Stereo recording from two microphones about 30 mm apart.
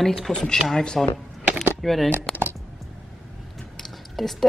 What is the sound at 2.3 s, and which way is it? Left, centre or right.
Typing, centre.